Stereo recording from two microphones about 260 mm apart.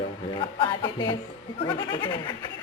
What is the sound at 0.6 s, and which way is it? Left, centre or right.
A woman's voice, centre.